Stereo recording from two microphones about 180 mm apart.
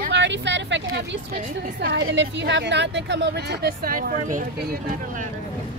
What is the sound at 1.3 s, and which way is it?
A woman's voice, 65° right (ahead or behind).